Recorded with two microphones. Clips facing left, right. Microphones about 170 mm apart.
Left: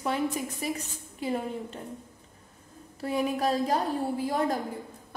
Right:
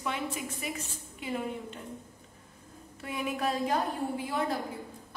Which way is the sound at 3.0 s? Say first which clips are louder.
Left 6 dB; 35° left (ahead or behind).